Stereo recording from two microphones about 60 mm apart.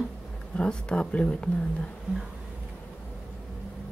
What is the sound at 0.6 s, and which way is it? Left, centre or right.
Speech, centre.